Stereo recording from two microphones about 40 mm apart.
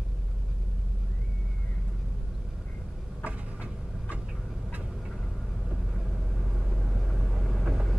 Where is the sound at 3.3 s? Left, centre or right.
Right.